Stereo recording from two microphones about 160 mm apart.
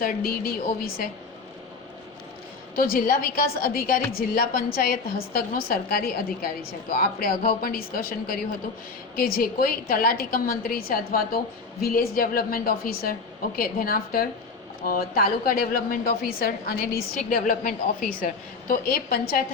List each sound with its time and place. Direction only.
0.0 s a woman's voice: 65° left (ahead or behind)
2.7 s a woman's voice: 65° left (ahead or behind)
17.2 s a woman's voice: 60° left (ahead or behind)